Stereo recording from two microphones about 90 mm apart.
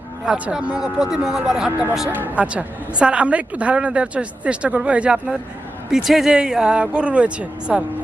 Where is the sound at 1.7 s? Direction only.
25° right (ahead or behind).